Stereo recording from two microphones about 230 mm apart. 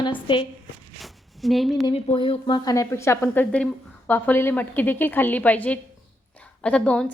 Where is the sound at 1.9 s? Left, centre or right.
Left.